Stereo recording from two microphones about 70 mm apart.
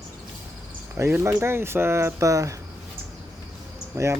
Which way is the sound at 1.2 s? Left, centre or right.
Right.